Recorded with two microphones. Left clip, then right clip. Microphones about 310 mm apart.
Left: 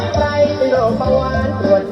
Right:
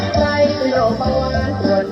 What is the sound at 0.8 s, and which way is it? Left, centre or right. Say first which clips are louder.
Music: left 2 dB; left.